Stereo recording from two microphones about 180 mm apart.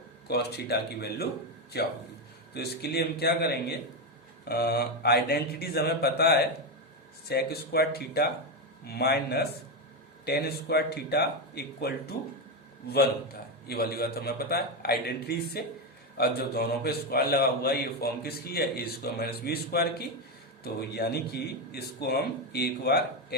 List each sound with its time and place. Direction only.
0.3 s a man's voice: 65° left (ahead or behind)